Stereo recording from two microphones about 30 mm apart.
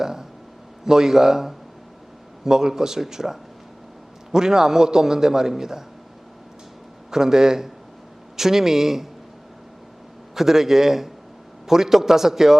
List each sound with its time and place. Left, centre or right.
0.0 s a sound: centre
0.9 s a man's voice: centre
7.1 s a man's voice: centre
10.3 s speech: centre